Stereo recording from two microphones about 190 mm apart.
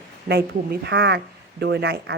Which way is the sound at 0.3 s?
60° right (ahead or behind).